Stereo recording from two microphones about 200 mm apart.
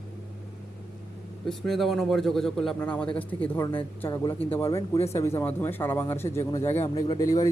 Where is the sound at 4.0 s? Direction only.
20° left (ahead or behind).